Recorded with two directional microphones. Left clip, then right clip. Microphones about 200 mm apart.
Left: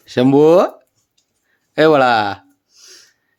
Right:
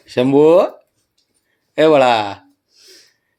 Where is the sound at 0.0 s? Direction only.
25° left (ahead or behind).